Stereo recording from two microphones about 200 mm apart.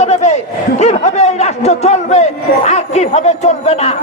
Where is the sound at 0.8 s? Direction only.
35° left (ahead or behind).